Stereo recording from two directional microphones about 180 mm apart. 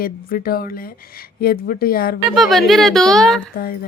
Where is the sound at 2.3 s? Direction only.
Centre (ahead or behind).